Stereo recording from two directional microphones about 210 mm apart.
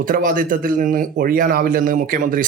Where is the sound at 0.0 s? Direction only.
40° right (ahead or behind).